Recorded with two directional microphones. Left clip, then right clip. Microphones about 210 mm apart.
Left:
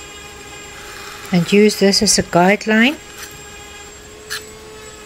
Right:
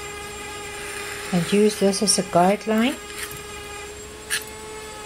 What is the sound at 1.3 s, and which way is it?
Speech, 35° left (ahead or behind).